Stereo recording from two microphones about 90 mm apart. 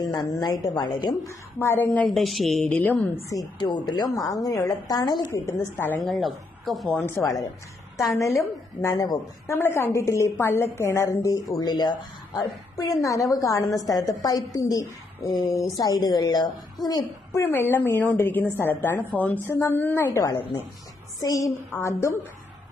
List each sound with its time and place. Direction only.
0.0 s a woman's voice: 45° left (ahead or behind)
1.2 s a woman's voice: 30° left (ahead or behind)
2.0 s speech: centre (ahead or behind)
2.6 s a woman's voice: 15° left (ahead or behind)
3.6 s a woman's voice: 55° left (ahead or behind)
5.5 s a woman's voice: 25° left (ahead or behind)
6.0 s speech: centre (ahead or behind)
7.0 s a woman's voice: 35° left (ahead or behind)
9.6 s a woman's voice: 25° left (ahead or behind)
11.6 s a woman's voice: 50° left (ahead or behind)
17.4 s a woman's voice: 25° left (ahead or behind)
21.2 s a woman's voice: 40° left (ahead or behind)
21.7 s a woman's voice: 30° left (ahead or behind)